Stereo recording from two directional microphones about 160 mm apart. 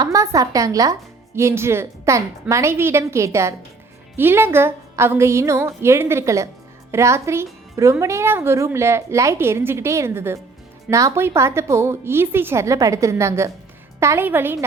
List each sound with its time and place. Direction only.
0.0 s a woman's voice: 20° right (ahead or behind)